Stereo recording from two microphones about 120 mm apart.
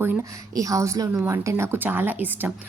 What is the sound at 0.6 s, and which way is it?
A woman's voice, 30° right (ahead or behind).